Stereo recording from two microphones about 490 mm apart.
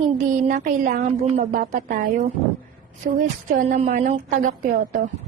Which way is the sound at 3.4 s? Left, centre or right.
Centre.